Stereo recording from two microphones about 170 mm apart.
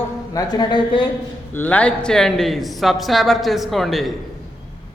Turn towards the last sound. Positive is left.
turn(degrees=0)  # may be behind; listen again after turning